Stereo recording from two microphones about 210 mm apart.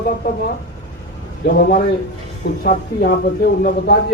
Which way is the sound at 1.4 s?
45° left (ahead or behind).